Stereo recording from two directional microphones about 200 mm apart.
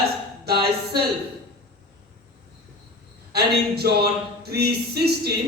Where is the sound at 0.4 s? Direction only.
50° right (ahead or behind).